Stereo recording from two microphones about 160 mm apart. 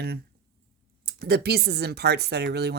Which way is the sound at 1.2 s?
90° right.